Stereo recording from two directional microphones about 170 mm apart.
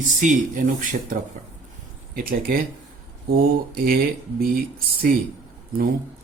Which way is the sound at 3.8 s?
60° right (ahead or behind).